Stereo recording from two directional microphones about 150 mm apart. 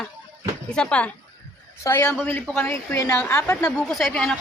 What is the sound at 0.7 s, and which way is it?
A woman's voice, 5° left (ahead or behind).